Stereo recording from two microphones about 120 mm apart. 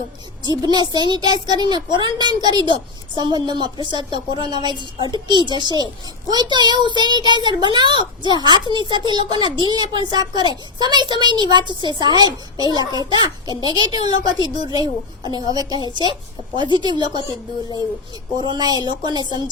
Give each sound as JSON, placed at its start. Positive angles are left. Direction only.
{"t": 0.4, "sound": "a child's voice", "side_deg": -35}
{"t": 18.3, "sound": "a child's voice", "side_deg": -35}